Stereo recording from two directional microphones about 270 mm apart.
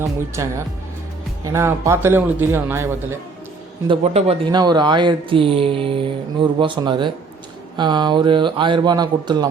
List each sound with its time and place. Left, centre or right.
0.0 s a man's voice: centre
3.8 s a man's voice: right